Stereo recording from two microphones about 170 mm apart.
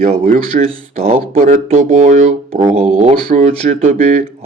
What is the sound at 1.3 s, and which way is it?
Speech, 55° right (ahead or behind).